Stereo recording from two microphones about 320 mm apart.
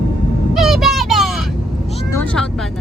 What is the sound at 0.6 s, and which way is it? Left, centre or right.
Vehicle, centre.